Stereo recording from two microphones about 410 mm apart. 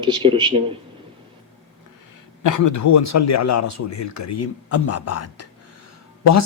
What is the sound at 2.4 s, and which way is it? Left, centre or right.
Speech, left.